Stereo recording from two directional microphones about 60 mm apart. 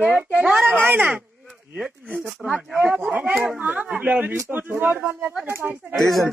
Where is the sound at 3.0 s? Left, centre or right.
Right.